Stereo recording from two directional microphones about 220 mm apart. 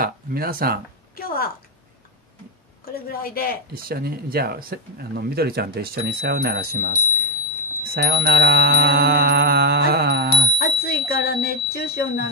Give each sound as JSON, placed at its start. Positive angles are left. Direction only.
{"t": 0.0, "sound": "speech", "side_deg": -40}
{"t": 1.1, "sound": "a sound", "side_deg": 40}
{"t": 2.9, "sound": "speech", "side_deg": 45}
{"t": 3.7, "sound": "speech", "side_deg": -45}
{"t": 10.6, "sound": "speech", "side_deg": 45}